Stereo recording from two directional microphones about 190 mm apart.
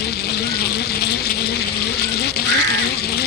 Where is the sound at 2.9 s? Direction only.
55° left (ahead or behind).